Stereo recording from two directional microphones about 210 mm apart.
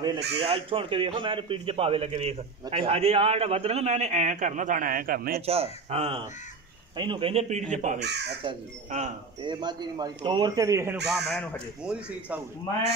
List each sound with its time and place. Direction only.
0.4 s a man's voice: 25° right (ahead or behind); by 5.4 s 45° right (ahead or behind)
5.4 s a man's voice: 30° right (ahead or behind)
8.0 s speech: 55° right (ahead or behind)
8.5 s a man's voice: 30° right (ahead or behind)
11.1 s speech: centre (ahead or behind)